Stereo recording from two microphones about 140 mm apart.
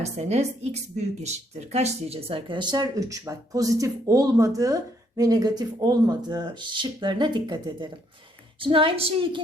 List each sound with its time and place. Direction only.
0.0 s speech: 50° right (ahead or behind)